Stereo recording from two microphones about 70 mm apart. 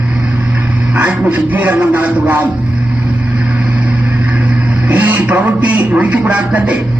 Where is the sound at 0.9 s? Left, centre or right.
Right.